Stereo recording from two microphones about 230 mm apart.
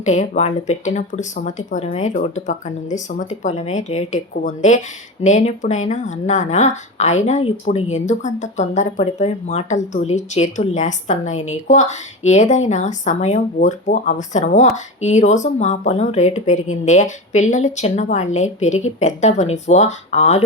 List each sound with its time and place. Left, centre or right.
0.0 s speech: left